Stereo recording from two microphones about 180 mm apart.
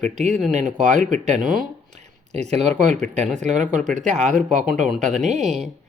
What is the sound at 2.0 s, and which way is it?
Speech, 35° right (ahead or behind).